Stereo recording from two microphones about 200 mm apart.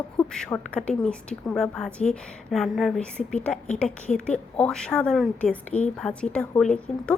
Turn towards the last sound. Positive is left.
turn(degrees=5)  # may be behind; listen again after turning